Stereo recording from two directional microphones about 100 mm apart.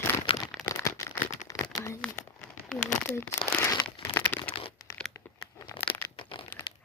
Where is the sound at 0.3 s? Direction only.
70° left (ahead or behind).